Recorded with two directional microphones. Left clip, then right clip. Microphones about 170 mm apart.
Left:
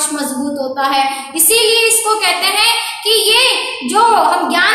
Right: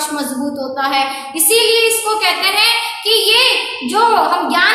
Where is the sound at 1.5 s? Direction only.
20° left (ahead or behind).